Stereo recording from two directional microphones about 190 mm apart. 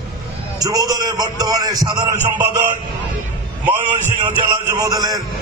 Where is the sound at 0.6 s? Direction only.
20° right (ahead or behind).